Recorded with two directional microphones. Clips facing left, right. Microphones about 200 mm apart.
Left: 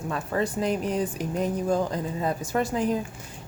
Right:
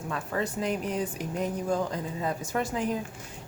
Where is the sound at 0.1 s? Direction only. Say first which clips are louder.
Left 4 dB; 35° left (ahead or behind).